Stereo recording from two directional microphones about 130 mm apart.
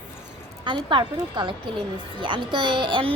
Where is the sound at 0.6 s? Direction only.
40° right (ahead or behind).